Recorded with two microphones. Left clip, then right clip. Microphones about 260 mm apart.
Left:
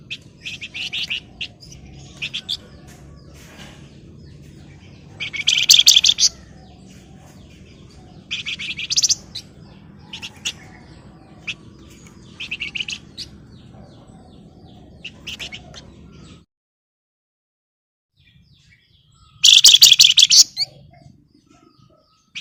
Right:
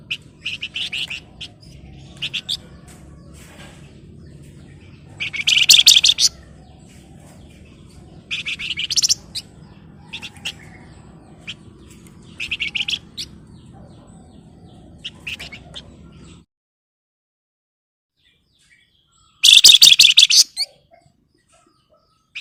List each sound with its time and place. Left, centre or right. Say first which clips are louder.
0.1 s bird: right 5 dB; centre
2.2 s bird: right 2 dB; centre
5.1 s bird: right 2 dB; centre
8.3 s bird: right 1 dB; centre
8.8 s bird: even; left
10.1 s bird: left 1 dB; centre
11.5 s bird: left 4 dB; centre
12.4 s bird: right 3 dB; right
15.4 s bird: left 2 dB; centre
19.4 s bird: right 1 dB; centre